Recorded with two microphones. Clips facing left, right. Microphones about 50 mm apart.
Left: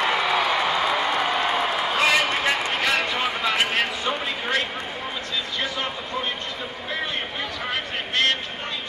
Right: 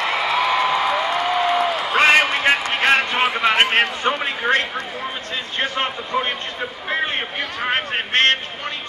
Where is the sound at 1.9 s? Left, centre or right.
Right.